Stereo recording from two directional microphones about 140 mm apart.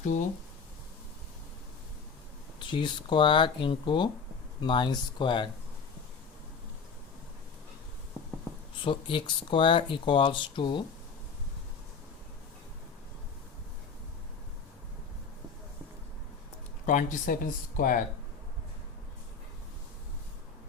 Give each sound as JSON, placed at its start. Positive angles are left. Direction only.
{"t": 2.6, "sound": "speech", "side_deg": 35}
{"t": 8.8, "sound": "speech", "side_deg": 35}
{"t": 16.8, "sound": "speech", "side_deg": 70}